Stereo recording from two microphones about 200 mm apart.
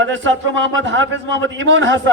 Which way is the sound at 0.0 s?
70° right (ahead or behind).